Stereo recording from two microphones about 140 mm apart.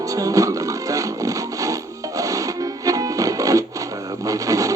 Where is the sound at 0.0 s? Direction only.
25° right (ahead or behind).